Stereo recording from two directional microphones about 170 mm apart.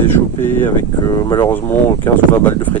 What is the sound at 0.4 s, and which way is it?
Speech, 15° left (ahead or behind).